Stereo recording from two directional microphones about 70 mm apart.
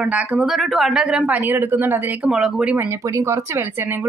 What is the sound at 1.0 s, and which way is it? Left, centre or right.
Speech, centre.